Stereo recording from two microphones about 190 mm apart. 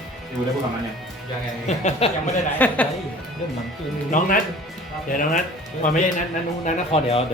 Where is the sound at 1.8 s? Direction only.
35° left (ahead or behind).